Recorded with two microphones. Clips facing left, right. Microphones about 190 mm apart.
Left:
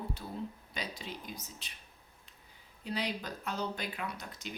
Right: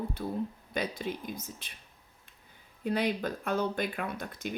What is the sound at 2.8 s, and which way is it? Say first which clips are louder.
Speech: right 7 dB; 55° right (ahead or behind).